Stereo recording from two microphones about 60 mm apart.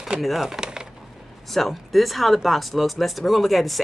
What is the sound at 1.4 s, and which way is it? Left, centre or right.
Speech, centre.